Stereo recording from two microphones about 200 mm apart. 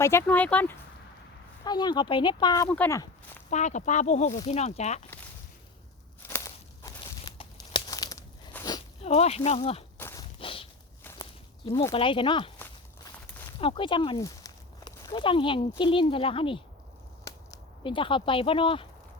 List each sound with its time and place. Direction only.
0.0 s speech: 10° left (ahead or behind)
1.6 s speech: 20° left (ahead or behind)
2.6 s speech: 5° left (ahead or behind)
3.0 s walk: 10° left (ahead or behind)
3.5 s speech: 35° left (ahead or behind)
6.2 s a sound: 15° left (ahead or behind)
7.0 s crunch: 25° left (ahead or behind)
9.0 s speech: 30° left (ahead or behind)
10.0 s a sound: 15° left (ahead or behind)
10.3 s walk: 25° left (ahead or behind)
11.7 s speech: 15° left (ahead or behind)
11.9 s speech: 25° left (ahead or behind)
13.6 s speech: 25° left (ahead or behind)